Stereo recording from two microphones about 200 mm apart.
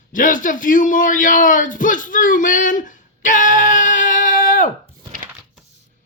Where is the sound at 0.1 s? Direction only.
40° left (ahead or behind).